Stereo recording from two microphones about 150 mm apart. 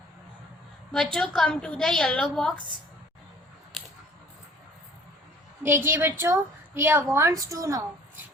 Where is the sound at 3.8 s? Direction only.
Centre (ahead or behind).